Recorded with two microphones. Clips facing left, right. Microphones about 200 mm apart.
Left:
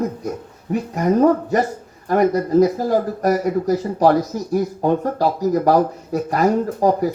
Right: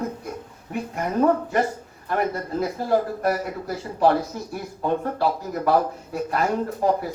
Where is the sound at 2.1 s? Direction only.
40° left (ahead or behind).